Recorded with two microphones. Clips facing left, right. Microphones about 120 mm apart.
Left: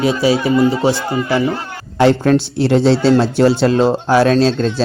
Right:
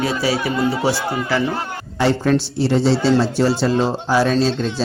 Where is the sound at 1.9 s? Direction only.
55° left (ahead or behind).